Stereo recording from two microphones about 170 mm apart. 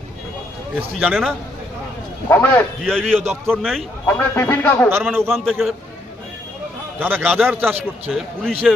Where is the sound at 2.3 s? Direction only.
10° left (ahead or behind).